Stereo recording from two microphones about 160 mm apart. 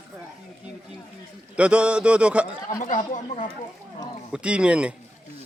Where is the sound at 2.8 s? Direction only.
50° left (ahead or behind).